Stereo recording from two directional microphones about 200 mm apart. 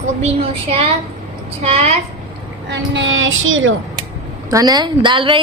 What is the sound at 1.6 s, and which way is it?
Speech, 30° right (ahead or behind).